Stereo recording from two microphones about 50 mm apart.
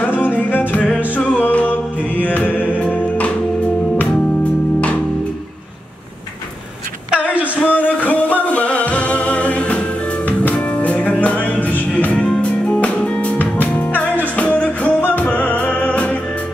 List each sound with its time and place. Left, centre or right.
0.2 s music: left
0.7 s music: left
1.4 s music: left
7.1 s a sound: right
7.4 s a sound: left
8.0 s music: left